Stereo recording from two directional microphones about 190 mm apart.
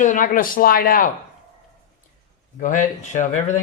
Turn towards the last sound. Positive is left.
turn(degrees=40)  # may be behind; listen again after turning